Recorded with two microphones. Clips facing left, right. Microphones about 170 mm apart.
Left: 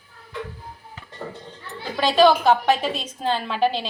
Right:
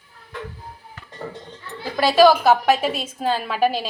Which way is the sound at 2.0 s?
5° right (ahead or behind).